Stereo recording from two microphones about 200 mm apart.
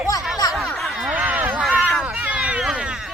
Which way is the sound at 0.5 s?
Centre (ahead or behind).